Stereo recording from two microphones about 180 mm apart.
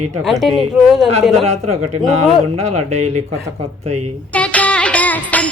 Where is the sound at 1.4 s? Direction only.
40° right (ahead or behind).